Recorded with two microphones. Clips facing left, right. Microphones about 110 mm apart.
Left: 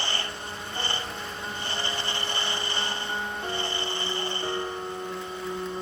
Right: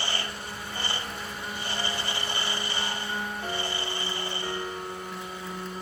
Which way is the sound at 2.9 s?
20° left (ahead or behind).